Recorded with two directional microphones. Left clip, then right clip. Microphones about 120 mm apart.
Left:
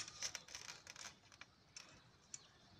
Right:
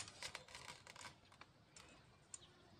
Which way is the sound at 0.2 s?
Centre (ahead or behind).